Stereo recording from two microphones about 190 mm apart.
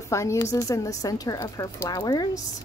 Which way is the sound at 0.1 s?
15° left (ahead or behind).